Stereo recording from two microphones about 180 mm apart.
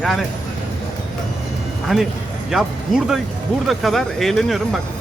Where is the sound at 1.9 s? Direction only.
5° right (ahead or behind).